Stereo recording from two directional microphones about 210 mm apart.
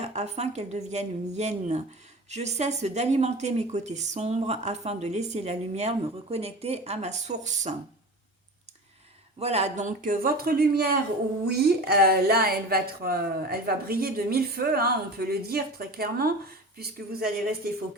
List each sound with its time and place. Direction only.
0.0 s speech: 30° right (ahead or behind)
9.4 s a woman's voice: 30° right (ahead or behind); by 17.2 s 45° right (ahead or behind)